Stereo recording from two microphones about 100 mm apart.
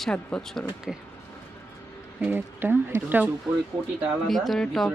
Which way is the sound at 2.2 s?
20° right (ahead or behind).